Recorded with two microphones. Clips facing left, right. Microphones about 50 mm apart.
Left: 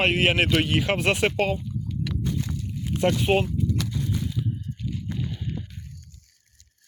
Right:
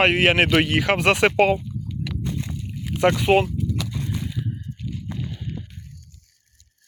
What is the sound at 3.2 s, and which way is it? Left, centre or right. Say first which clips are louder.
Speech: right 5 dB; right.